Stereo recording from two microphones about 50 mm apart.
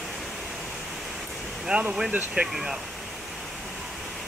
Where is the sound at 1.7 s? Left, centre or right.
Centre.